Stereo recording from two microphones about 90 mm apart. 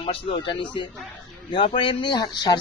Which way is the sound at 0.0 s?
90° left.